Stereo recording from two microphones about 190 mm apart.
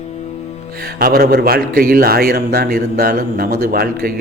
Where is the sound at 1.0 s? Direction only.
50° right (ahead or behind).